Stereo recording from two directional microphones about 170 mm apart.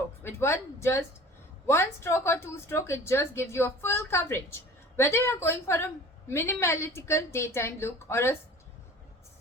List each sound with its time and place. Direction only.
0.2 s a woman's voice: 15° left (ahead or behind)